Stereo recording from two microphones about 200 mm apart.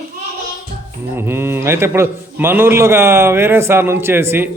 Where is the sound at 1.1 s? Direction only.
10° right (ahead or behind).